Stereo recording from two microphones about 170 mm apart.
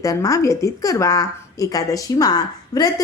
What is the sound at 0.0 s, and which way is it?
A woman's voice, 20° left (ahead or behind).